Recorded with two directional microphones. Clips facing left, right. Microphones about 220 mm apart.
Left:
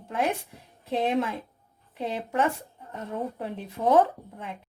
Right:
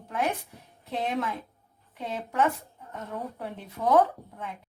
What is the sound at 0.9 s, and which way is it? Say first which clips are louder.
A woman's voice: left 4 dB; 30° left (ahead or behind).